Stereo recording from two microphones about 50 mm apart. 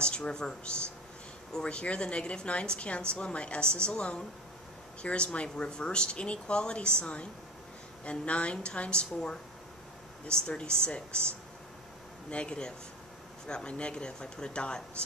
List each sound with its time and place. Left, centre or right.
0.0 s a woman's voice: centre
12.3 s a woman's voice: centre